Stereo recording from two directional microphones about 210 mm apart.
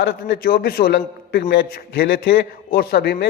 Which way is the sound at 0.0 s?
50° left (ahead or behind).